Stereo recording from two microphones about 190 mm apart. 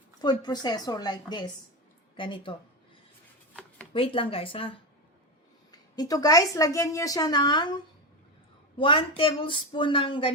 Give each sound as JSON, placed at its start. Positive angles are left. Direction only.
{"t": 0.2, "sound": "a woman's voice", "side_deg": 20}
{"t": 3.9, "sound": "a woman's voice", "side_deg": 30}
{"t": 6.0, "sound": "a woman's voice", "side_deg": 20}
{"t": 8.8, "sound": "a woman's voice", "side_deg": 30}